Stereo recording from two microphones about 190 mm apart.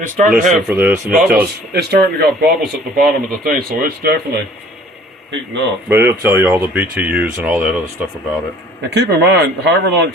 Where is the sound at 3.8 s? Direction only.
55° right (ahead or behind).